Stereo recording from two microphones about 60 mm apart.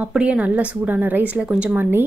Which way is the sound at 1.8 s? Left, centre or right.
Right.